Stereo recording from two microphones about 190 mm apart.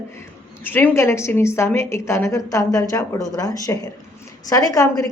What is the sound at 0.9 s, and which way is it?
A woman's voice, 15° left (ahead or behind).